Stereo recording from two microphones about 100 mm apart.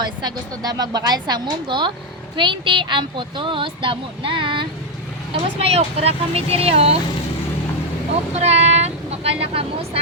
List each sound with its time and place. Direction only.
0.0 s a woman's voice: 45° right (ahead or behind)
5.3 s speech: 85° right
8.4 s speech: 90° right